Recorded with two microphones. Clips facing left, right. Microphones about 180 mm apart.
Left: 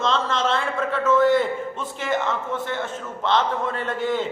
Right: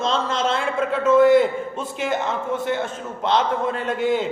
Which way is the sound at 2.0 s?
15° right (ahead or behind).